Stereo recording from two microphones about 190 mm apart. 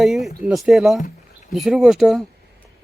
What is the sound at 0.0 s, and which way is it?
Speech, centre (ahead or behind).